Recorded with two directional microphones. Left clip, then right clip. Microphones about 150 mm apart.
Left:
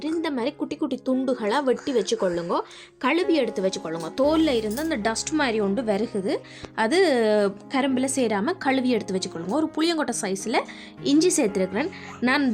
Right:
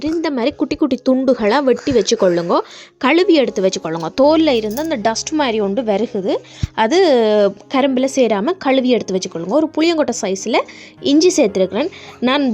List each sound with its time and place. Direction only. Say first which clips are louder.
0.0 s a woman's voice: right 8 dB; 45° right (ahead or behind)